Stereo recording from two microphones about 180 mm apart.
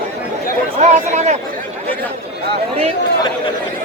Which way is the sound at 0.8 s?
40° right (ahead or behind).